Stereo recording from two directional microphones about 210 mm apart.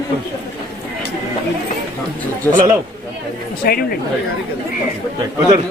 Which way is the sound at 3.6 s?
45° left (ahead or behind).